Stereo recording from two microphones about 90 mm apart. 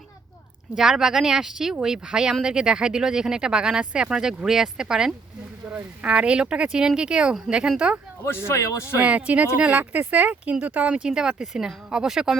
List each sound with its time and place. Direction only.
0.8 s speech: 5° right (ahead or behind)
8.4 s speech: 35° left (ahead or behind)
9.0 s speech: 15° right (ahead or behind)